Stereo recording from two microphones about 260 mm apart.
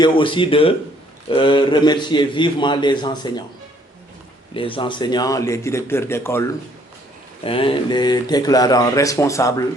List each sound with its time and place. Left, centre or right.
0.0 s speech: centre
4.5 s speech: centre
7.4 s speech: left